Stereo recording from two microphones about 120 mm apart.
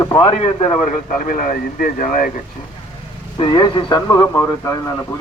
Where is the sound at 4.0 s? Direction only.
30° left (ahead or behind).